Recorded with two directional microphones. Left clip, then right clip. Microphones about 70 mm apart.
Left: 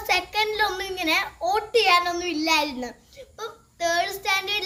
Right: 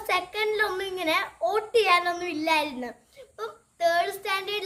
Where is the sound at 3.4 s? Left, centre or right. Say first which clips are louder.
Right 1 dB; right.